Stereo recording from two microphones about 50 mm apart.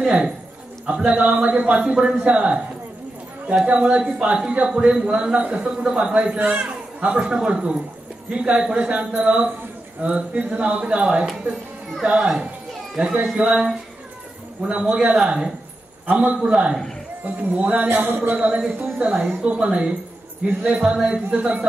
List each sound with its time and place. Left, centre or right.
0.0 s a man's voice: centre
7.0 s a man's voice: right
12.0 s a man's voice: centre
16.1 s a man's voice: right
17.2 s a man's voice: right
17.8 s speech: right
18.3 s a man's voice: right